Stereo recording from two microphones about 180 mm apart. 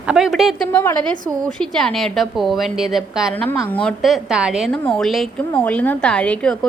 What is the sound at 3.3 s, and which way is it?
A woman's voice, 10° left (ahead or behind).